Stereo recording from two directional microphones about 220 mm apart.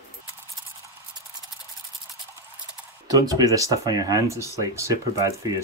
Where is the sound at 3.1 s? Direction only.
15° right (ahead or behind).